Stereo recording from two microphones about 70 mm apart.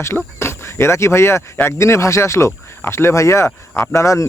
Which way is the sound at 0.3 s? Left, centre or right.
Left.